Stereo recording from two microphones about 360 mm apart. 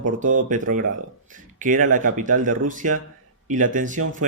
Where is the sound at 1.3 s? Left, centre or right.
Right.